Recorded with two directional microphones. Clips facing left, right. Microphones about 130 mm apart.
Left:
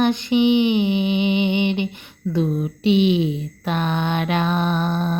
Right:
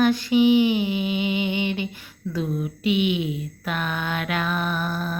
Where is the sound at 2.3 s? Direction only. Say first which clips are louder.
Left 5 dB; 30° left (ahead or behind).